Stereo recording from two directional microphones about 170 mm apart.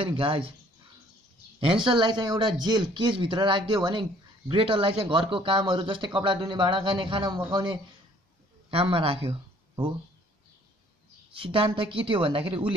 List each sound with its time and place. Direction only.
0.0 s a woman's voice: 30° right (ahead or behind)
1.9 s speech: 25° right (ahead or behind)
11.3 s a woman's voice: 30° right (ahead or behind)